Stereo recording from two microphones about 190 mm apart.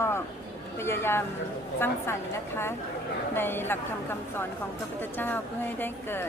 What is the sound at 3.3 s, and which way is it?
A woman's voice, 10° left (ahead or behind).